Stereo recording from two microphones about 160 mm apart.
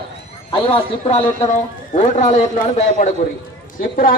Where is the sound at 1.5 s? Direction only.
45° left (ahead or behind).